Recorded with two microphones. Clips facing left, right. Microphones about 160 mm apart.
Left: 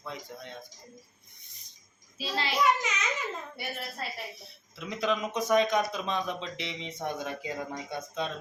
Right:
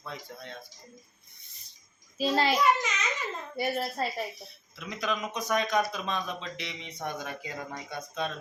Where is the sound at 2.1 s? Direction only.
45° right (ahead or behind).